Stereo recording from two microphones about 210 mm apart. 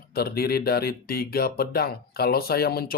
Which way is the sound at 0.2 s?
45° left (ahead or behind).